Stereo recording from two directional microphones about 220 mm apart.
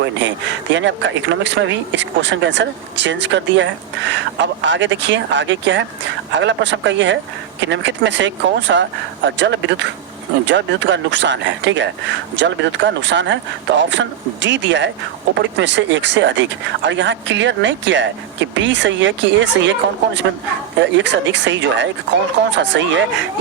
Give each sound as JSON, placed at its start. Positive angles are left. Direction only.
{"t": 0.0, "sound": "a woman's voice", "side_deg": -55}